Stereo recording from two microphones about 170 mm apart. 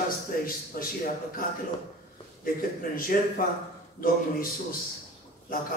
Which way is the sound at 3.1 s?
55° left (ahead or behind).